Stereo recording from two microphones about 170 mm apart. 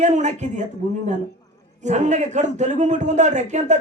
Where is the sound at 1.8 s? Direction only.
45° right (ahead or behind).